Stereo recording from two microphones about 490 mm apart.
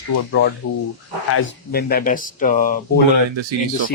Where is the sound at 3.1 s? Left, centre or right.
Right.